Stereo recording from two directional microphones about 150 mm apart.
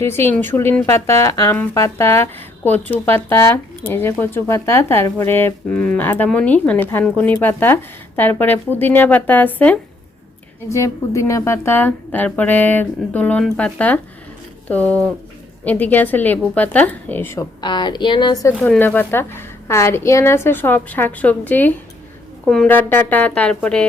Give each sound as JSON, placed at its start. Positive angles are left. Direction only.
{"t": 0.0, "sound": "speech", "side_deg": 15}
{"t": 17.6, "sound": "speech", "side_deg": 30}
{"t": 18.6, "sound": "speech", "side_deg": 10}